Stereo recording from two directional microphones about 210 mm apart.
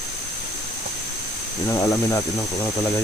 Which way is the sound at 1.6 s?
15° left (ahead or behind).